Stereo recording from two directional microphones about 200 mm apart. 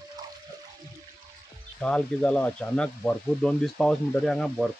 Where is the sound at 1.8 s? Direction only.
5° left (ahead or behind).